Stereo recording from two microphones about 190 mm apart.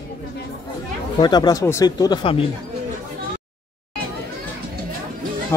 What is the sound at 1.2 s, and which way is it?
Speech, 20° left (ahead or behind).